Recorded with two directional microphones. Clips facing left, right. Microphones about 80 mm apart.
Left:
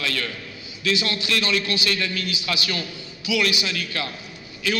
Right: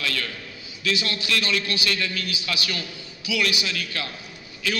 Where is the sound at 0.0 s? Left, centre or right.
Left.